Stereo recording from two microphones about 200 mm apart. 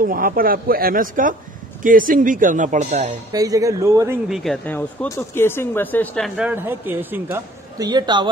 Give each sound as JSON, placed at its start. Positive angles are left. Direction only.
{"t": 0.0, "sound": "speech", "side_deg": -45}
{"t": 3.3, "sound": "speech", "side_deg": -15}
{"t": 4.3, "sound": "speech", "side_deg": 0}